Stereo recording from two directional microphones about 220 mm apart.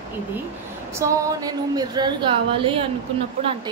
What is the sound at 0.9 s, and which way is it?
A woman's voice, 15° right (ahead or behind).